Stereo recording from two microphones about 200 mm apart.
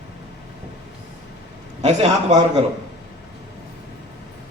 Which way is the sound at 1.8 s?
35° right (ahead or behind).